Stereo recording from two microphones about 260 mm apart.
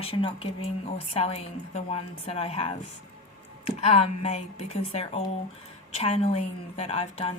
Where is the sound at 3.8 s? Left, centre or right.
Left.